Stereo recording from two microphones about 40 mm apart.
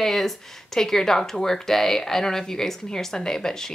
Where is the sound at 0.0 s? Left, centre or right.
Centre.